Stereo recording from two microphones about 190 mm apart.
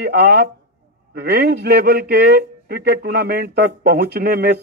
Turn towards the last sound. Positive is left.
turn(degrees=-55)  # may be behind; listen again after turning